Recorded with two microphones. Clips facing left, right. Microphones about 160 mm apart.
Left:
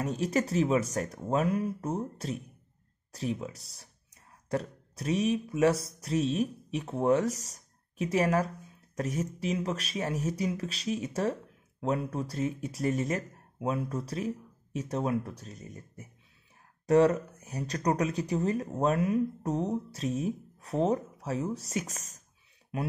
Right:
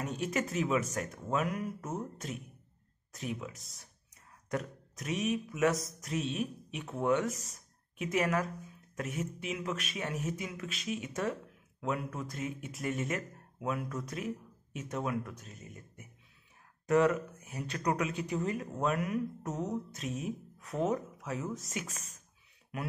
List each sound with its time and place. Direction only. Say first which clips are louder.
0.0 s speech: left 5 dB; 35° left (ahead or behind)